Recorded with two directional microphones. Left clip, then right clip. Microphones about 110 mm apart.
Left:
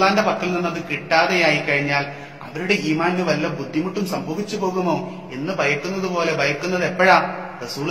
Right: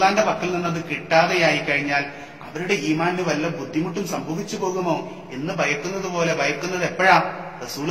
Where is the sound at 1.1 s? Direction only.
25° left (ahead or behind).